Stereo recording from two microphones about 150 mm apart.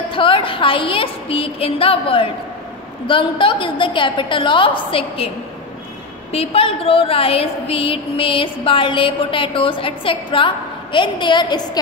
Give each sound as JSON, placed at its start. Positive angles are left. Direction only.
{"t": 0.1, "sound": "a woman's voice", "side_deg": 35}
{"t": 6.3, "sound": "a woman's voice", "side_deg": 40}